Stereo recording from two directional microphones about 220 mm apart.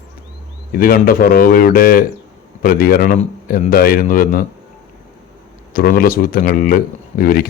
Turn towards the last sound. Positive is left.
turn(degrees=40)  # may be behind; listen again after turning